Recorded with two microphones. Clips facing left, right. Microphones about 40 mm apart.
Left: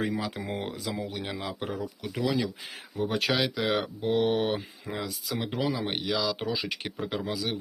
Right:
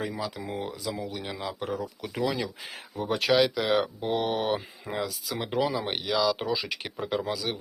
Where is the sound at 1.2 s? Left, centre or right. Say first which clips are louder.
Even; centre.